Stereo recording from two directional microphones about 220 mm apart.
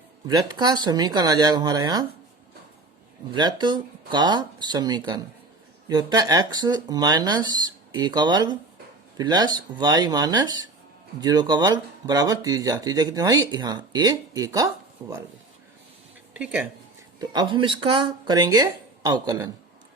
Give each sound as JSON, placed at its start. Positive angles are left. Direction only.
{"t": 0.3, "sound": "speech", "side_deg": -20}
{"t": 3.3, "sound": "speech", "side_deg": -20}
{"t": 16.3, "sound": "speech", "side_deg": -5}
{"t": 17.2, "sound": "speech", "side_deg": -20}